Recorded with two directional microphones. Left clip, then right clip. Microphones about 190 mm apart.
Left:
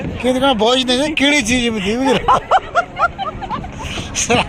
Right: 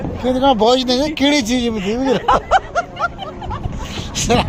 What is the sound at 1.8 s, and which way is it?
Speech, 20° left (ahead or behind).